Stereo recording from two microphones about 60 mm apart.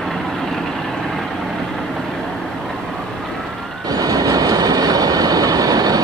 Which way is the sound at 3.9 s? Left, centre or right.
Right.